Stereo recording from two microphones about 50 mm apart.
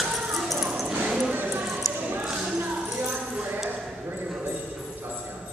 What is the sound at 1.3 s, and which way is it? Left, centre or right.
Clip-clop, right.